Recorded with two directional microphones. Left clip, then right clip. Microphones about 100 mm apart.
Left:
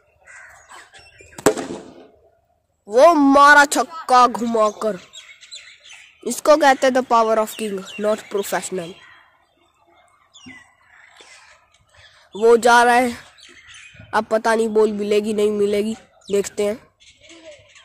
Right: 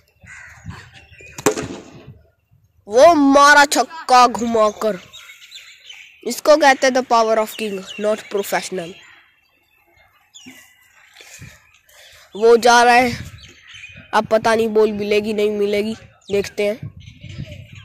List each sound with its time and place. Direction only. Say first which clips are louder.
2.9 s speech: right 2 dB; 10° right (ahead or behind)
6.2 s speech: right 1 dB; 5° left (ahead or behind)
12.3 s speech: right 1 dB; centre (ahead or behind)
15.0 s speech: right 1 dB; 15° left (ahead or behind)